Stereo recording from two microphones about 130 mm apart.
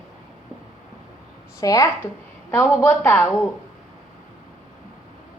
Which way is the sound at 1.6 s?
25° left (ahead or behind).